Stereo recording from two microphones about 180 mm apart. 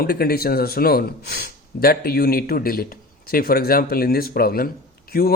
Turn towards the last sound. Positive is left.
turn(degrees=55)  # may be behind; listen again after turning